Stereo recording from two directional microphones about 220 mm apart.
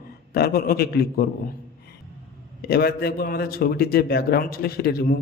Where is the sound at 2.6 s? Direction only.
45° left (ahead or behind).